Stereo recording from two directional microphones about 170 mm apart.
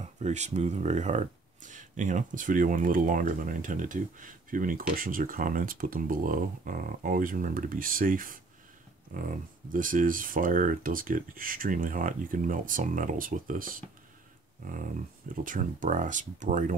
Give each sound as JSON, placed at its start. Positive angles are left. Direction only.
{"t": 0.0, "sound": "speech", "side_deg": -40}